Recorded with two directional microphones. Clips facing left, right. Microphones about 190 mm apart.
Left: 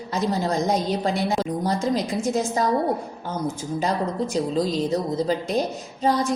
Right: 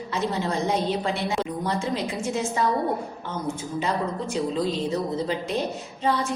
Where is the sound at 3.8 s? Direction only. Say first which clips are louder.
Left 4 dB; 40° left (ahead or behind).